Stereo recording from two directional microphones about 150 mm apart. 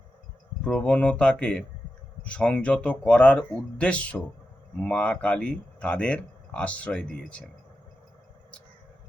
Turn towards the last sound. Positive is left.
turn(degrees=5)  # may be behind; listen again after turning